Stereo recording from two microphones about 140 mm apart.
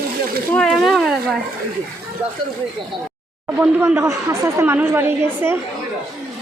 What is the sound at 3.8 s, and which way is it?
Speech, 15° right (ahead or behind).